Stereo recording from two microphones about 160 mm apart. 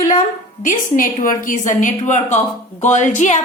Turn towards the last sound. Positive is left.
turn(degrees=50)  # may be behind; listen again after turning